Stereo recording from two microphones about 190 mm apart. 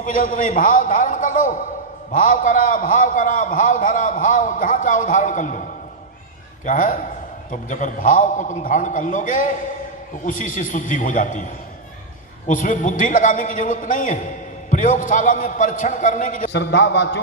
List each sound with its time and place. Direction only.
0.0 s a man's voice: 45° left (ahead or behind)
6.7 s a man's voice: 45° left (ahead or behind)
12.5 s a man's voice: 40° left (ahead or behind)
16.5 s a man's voice: 70° left (ahead or behind)